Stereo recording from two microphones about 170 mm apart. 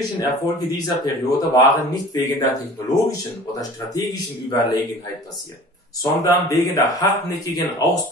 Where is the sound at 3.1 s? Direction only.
20° left (ahead or behind).